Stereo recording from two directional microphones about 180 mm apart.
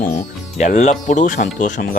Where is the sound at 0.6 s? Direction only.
40° left (ahead or behind).